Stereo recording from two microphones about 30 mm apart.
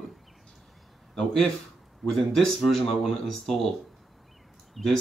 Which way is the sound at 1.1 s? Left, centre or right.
Centre.